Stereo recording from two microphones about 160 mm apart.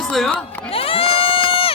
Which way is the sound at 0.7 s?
35° left (ahead or behind).